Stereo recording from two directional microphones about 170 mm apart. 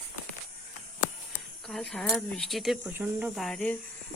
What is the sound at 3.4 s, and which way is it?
Speech, centre (ahead or behind).